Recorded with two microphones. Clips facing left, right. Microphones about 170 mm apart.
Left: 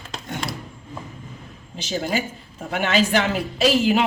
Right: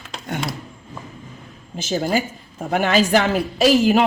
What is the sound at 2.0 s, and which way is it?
Speech, 45° right (ahead or behind).